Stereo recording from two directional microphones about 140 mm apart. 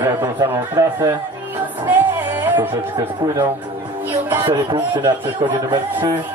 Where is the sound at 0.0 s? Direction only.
15° right (ahead or behind).